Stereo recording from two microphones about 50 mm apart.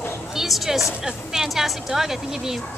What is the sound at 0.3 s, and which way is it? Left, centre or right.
A woman's voice, centre.